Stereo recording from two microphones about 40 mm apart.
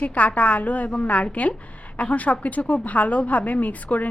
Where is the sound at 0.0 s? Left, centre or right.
Left.